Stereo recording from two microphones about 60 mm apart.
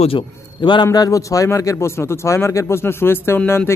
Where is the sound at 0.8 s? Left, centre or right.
Left.